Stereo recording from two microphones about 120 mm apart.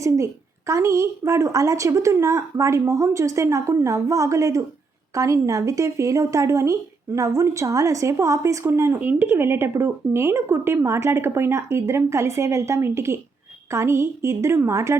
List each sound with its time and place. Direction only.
0.7 s speech: 25° right (ahead or behind)